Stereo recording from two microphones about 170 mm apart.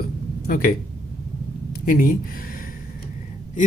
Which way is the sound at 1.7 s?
55° left (ahead or behind).